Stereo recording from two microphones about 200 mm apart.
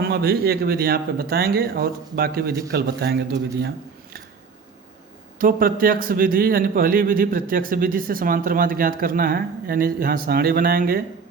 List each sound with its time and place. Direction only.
0.1 s a man's voice: 50° right (ahead or behind)
5.4 s a man's voice: 45° right (ahead or behind)